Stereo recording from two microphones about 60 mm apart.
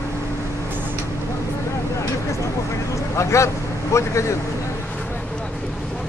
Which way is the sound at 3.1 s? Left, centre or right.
Left.